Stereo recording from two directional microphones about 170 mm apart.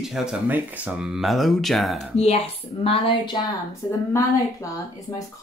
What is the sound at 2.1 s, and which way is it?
Speech, 35° left (ahead or behind).